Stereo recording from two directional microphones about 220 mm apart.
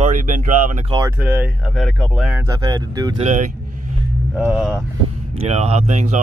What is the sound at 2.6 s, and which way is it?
Speech, 20° right (ahead or behind).